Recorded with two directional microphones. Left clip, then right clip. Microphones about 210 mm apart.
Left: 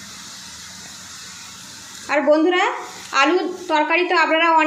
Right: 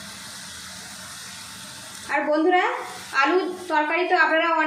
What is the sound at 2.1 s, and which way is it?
A woman's voice, 40° left (ahead or behind).